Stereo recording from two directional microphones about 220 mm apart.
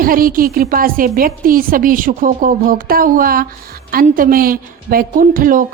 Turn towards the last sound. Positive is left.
turn(degrees=-40)  # may be behind; listen again after turning